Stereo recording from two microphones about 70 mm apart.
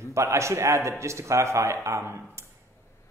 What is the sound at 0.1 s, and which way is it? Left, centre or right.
A man's voice, right.